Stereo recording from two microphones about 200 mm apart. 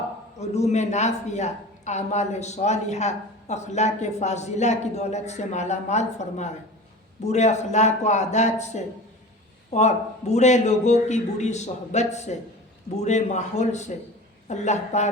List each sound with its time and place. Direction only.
0.3 s speech: 35° left (ahead or behind)